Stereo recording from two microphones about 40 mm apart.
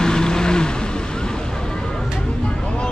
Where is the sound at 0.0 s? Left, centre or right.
Centre.